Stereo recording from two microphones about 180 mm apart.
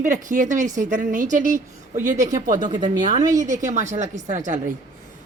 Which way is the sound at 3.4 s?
45° right (ahead or behind).